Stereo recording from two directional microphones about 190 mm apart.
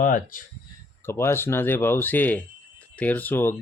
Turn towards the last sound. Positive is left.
turn(degrees=10)  # may be behind; listen again after turning